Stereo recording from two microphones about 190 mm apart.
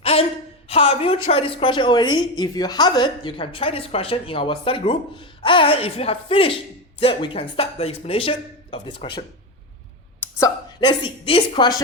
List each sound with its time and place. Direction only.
0.0 s a sound: 30° left (ahead or behind)
0.7 s a woman's voice: 30° left (ahead or behind)
10.4 s a woman's voice: 25° left (ahead or behind)